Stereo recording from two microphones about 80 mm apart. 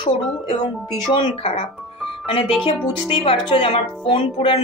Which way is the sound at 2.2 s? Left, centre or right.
Left.